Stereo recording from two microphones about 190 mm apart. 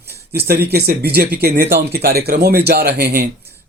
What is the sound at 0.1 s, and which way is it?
Speech, 55° right (ahead or behind).